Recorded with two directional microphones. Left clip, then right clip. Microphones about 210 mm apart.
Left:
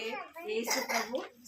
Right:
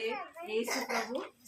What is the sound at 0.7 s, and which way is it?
Speech, 45° left (ahead or behind).